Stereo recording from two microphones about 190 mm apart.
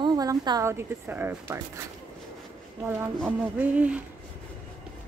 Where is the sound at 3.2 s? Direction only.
5° right (ahead or behind).